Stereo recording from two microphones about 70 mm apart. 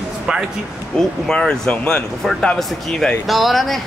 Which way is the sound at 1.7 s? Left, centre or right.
Left.